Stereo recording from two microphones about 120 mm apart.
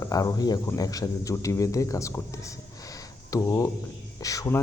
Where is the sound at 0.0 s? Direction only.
30° left (ahead or behind).